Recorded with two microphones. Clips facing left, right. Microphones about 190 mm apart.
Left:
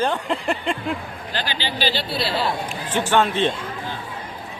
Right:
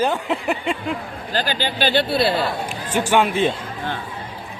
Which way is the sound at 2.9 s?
10° right (ahead or behind).